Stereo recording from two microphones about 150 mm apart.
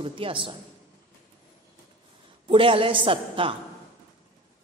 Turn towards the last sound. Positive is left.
turn(degrees=-35)  # may be behind; listen again after turning